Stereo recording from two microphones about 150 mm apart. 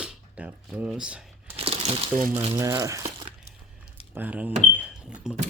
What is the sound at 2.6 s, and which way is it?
Speech, 20° right (ahead or behind).